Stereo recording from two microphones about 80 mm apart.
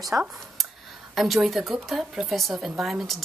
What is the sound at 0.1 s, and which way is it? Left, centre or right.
Speech, right.